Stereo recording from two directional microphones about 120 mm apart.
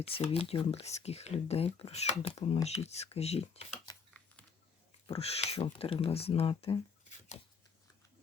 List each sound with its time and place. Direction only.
0.0 s speech: 55° left (ahead or behind)
5.0 s speech: 55° left (ahead or behind)